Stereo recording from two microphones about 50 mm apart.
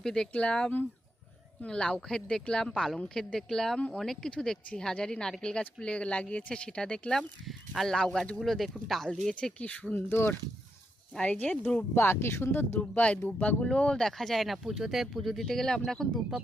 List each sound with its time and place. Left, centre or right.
0.0 s speech: centre
7.2 s speech: centre
7.9 s speech: centre
8.4 s speech: centre
9.3 s speech: left
10.1 s speech: left
11.2 s speech: left
11.9 s speech: left
12.9 s speech: left
14.0 s speech: centre